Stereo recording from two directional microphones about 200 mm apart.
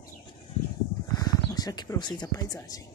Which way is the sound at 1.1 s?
20° left (ahead or behind).